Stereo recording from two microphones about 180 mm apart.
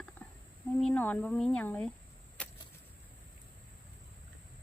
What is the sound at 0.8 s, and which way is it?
Speech, 5° left (ahead or behind).